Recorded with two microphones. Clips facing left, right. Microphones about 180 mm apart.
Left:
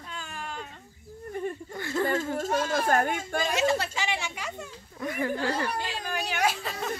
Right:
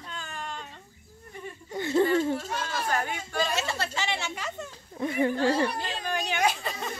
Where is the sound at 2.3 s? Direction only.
50° left (ahead or behind).